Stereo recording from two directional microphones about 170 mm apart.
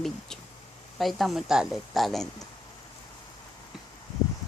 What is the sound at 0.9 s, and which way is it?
Speech, centre (ahead or behind).